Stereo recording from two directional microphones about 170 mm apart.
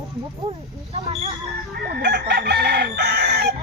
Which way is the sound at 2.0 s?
75° right (ahead or behind).